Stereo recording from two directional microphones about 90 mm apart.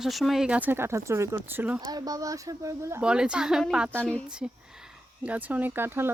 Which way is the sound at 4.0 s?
15° left (ahead or behind).